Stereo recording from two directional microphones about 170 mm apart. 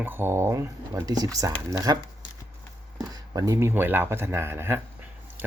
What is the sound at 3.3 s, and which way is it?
Speech, 20° right (ahead or behind).